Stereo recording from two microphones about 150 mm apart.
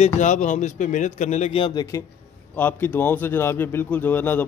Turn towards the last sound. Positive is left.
turn(degrees=10)  # may be behind; listen again after turning